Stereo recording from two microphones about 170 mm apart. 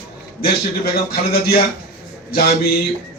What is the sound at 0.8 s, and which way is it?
Speech, 70° left (ahead or behind).